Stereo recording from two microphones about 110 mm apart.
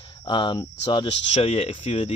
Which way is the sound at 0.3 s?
50° left (ahead or behind).